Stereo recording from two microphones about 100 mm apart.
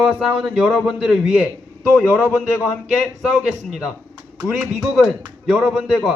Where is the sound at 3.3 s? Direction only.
5° right (ahead or behind).